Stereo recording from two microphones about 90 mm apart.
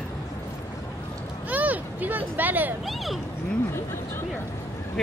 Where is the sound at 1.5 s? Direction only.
20° right (ahead or behind).